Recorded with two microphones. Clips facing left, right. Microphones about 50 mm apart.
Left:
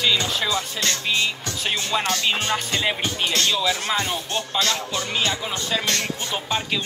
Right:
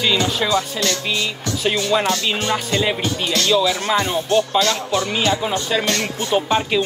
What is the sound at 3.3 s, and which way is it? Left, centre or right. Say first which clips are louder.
Speech: right 6 dB; left.